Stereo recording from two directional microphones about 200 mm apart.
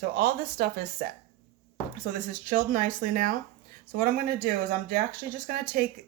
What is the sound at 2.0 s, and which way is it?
Speech, 40° right (ahead or behind).